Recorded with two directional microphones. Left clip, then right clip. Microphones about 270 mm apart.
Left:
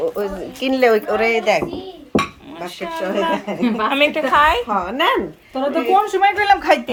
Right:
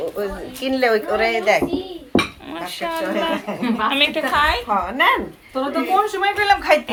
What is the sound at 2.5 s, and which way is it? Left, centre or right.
Speech, centre.